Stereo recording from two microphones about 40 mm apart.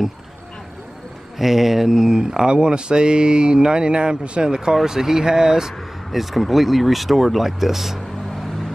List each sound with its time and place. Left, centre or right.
1.4 s mantra: centre
4.8 s speech: centre
6.1 s speech: centre